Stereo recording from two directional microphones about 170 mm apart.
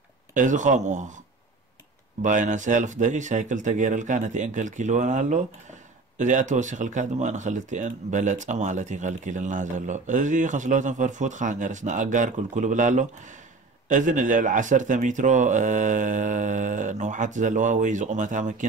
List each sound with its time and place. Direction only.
0.3 s speech: 50° right (ahead or behind)
2.2 s speech: 50° right (ahead or behind)